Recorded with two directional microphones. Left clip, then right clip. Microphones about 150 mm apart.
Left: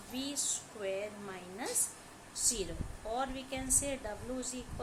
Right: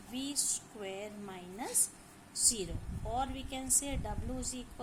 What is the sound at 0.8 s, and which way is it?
Speech, 40° right (ahead or behind).